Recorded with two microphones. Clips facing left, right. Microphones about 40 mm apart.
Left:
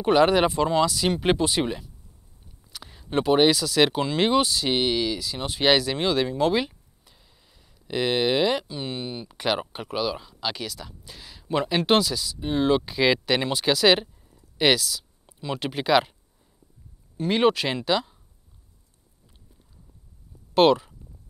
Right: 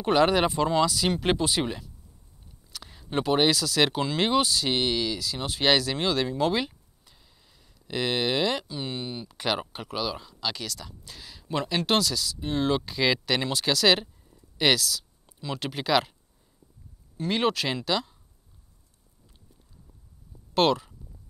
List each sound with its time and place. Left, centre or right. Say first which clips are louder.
0.0 s speech: left 3 dB; centre
17.2 s speech: left 5 dB; centre
20.5 s speech: left 5 dB; centre